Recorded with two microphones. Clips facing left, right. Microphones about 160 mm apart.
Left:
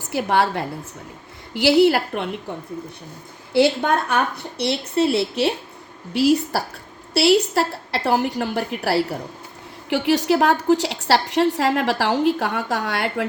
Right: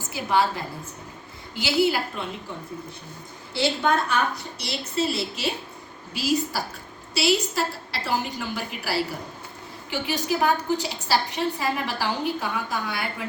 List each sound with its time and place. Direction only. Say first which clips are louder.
0.1 s a woman's voice: left 4 dB; 65° left (ahead or behind)
3.5 s a woman's voice: left 6 dB; 60° left (ahead or behind); by 13.2 s 75° left (ahead or behind)